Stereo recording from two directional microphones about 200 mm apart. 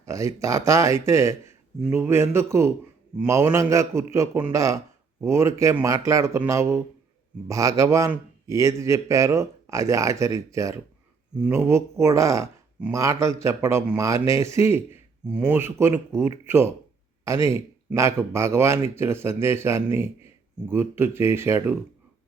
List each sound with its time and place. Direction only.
0.0 s speech: 15° right (ahead or behind)
11.3 s speech: 5° right (ahead or behind)